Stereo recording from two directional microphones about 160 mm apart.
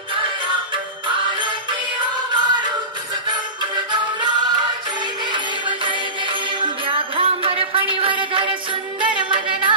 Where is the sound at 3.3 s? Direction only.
25° right (ahead or behind).